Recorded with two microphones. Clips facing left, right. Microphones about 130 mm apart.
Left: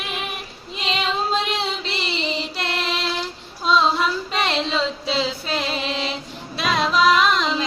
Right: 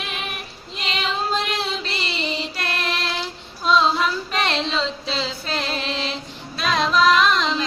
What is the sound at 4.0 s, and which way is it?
Female singing, 10° left (ahead or behind).